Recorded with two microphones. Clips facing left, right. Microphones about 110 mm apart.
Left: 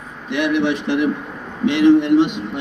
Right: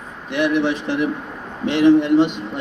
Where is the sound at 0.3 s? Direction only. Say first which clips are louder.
Even; 40° right (ahead or behind).